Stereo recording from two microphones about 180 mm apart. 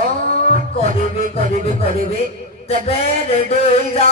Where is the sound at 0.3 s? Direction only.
35° left (ahead or behind).